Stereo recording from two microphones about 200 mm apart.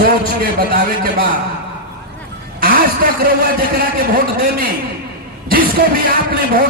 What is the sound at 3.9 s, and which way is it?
A man's voice, 45° right (ahead or behind).